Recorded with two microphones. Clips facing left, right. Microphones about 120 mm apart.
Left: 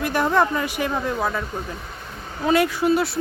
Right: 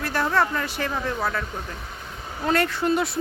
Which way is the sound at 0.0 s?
15° left (ahead or behind).